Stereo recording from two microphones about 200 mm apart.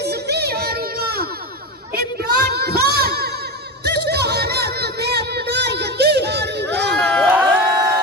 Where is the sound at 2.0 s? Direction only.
50° right (ahead or behind).